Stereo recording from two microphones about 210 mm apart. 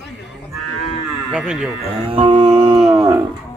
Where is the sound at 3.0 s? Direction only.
20° right (ahead or behind).